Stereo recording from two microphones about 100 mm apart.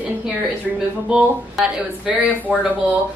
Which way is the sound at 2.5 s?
10° right (ahead or behind).